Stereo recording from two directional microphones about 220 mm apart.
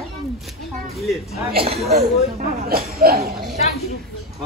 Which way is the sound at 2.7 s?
45° right (ahead or behind).